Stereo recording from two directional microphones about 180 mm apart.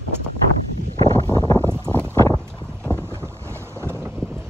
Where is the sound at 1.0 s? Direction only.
20° left (ahead or behind).